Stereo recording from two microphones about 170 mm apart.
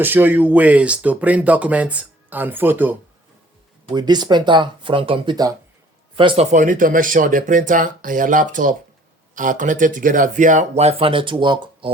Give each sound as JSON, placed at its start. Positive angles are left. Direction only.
{"t": 0.0, "sound": "speech", "side_deg": -10}
{"t": 3.8, "sound": "speech", "side_deg": -25}